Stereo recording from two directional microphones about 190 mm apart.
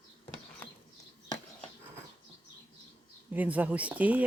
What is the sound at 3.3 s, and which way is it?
Speech, 10° right (ahead or behind).